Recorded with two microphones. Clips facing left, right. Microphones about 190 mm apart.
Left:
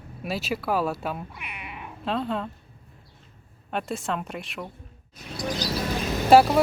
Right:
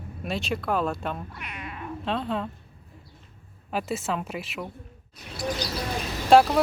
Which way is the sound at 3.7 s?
5° right (ahead or behind).